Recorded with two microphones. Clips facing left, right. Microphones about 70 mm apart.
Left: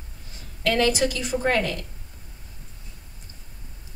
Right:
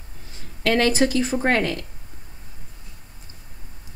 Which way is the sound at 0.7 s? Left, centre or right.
Right.